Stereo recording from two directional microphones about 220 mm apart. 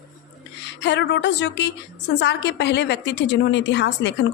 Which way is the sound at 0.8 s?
50° left (ahead or behind).